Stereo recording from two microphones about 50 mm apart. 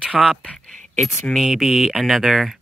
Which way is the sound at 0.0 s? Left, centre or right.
Centre.